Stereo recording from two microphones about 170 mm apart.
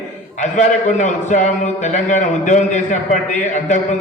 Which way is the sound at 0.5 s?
45° left (ahead or behind).